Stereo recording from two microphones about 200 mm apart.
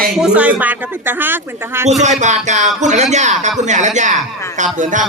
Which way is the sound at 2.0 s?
35° right (ahead or behind).